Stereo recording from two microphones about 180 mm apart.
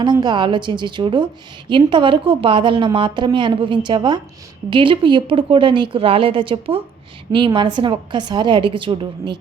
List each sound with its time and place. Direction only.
0.0 s a woman's voice: 25° right (ahead or behind)